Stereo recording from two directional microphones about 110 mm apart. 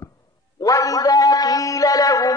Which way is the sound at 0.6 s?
30° left (ahead or behind).